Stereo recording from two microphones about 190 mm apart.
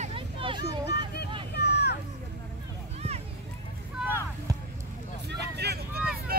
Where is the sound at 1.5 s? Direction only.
60° left (ahead or behind).